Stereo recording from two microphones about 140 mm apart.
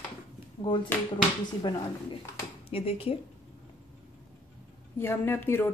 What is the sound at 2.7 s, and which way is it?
Speech, 45° left (ahead or behind).